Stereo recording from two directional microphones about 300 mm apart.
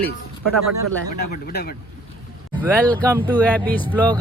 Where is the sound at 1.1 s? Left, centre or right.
Left.